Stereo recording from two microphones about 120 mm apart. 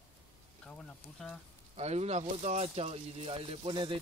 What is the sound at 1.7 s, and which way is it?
A man's voice, 65° right (ahead or behind).